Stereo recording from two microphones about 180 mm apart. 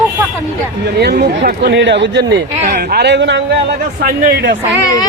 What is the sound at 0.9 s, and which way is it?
Speech, 65° right (ahead or behind).